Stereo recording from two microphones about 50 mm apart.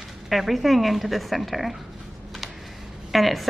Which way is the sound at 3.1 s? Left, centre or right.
Centre.